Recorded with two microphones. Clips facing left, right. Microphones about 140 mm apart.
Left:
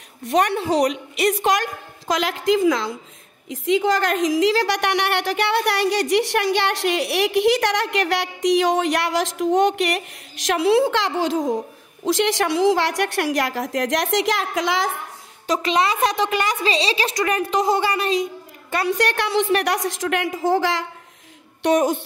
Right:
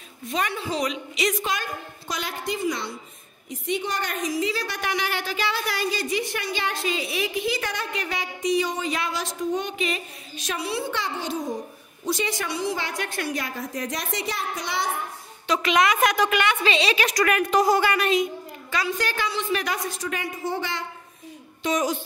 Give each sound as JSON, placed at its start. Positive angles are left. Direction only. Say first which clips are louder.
{"t": 0.2, "sound": "a woman's voice", "louder": "left 8 dB", "side_deg": 70}
{"t": 15.4, "sound": "a woman's voice", "louder": "left 1 dB", "side_deg": 35}
{"t": 18.7, "sound": "a woman's voice", "louder": "left 6 dB", "side_deg": 65}
{"t": 21.6, "sound": "a woman's voice", "louder": "left 7 dB", "side_deg": 55}